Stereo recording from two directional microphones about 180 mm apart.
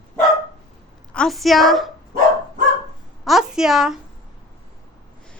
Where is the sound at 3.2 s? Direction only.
Centre (ahead or behind).